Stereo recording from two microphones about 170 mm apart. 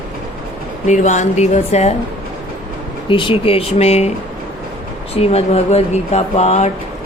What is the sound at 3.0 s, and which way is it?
A woman's voice, 30° left (ahead or behind).